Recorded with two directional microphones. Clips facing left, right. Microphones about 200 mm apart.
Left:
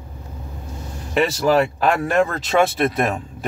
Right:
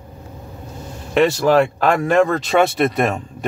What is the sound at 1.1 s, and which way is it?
Speech, 5° left (ahead or behind).